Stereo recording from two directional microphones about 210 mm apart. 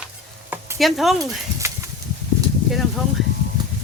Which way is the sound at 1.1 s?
15° right (ahead or behind).